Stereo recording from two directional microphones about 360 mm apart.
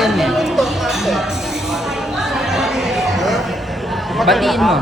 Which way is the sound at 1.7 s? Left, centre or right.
Centre.